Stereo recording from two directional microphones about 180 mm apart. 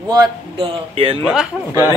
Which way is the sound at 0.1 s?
25° right (ahead or behind).